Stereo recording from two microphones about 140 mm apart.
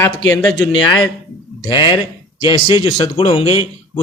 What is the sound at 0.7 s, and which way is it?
A man's voice, 40° left (ahead or behind).